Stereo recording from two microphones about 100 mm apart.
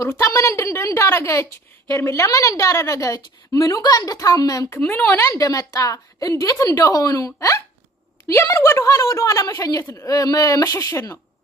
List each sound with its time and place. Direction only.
0.0 s a woman's voice: 30° left (ahead or behind)
4.8 s speech: 10° left (ahead or behind)
5.1 s a woman's voice: 30° left (ahead or behind)